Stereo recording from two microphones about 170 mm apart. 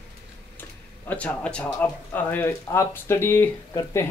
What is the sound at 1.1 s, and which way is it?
Speech, 10° left (ahead or behind).